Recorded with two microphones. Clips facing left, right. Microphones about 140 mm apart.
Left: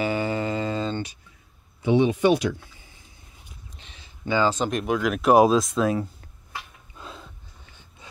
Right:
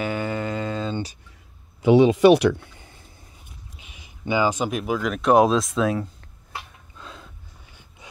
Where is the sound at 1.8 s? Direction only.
90° right; by 3.0 s 60° right (ahead or behind).